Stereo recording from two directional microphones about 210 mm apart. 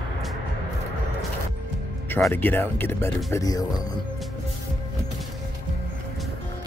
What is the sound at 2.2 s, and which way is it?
Speech, 10° left (ahead or behind).